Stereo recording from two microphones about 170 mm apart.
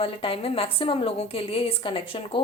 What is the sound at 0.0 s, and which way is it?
A woman's voice, 35° left (ahead or behind).